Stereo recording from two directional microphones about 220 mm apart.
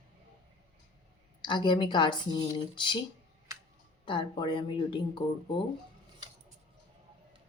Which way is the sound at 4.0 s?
20° left (ahead or behind).